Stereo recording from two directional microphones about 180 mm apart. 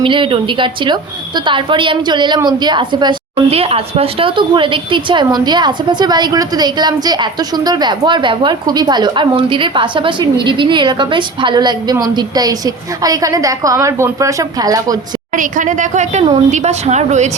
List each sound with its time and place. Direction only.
0.0 s speech: 30° right (ahead or behind)
15.4 s a woman's voice: 45° right (ahead or behind)